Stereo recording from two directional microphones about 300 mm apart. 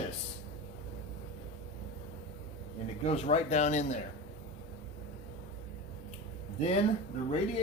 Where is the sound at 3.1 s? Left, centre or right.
Left.